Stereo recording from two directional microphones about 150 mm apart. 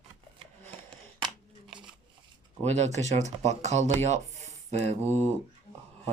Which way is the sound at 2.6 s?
50° right (ahead or behind).